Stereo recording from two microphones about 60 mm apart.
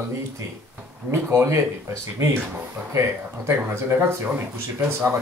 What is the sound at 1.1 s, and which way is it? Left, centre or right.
Speech, right.